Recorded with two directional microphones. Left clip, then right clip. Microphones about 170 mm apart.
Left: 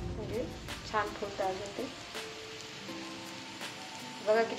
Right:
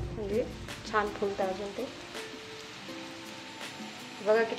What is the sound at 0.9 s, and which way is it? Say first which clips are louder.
Speech: right 3 dB; 40° right (ahead or behind).